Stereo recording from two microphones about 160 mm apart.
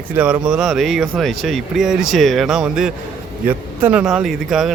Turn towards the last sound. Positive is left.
turn(degrees=0)  # may be behind; listen again after turning